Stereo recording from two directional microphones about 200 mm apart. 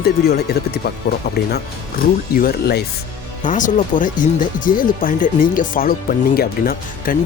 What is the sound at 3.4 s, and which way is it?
Speech, 40° left (ahead or behind).